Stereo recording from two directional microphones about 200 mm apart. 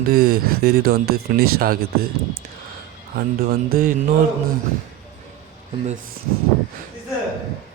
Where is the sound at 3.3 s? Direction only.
45° right (ahead or behind).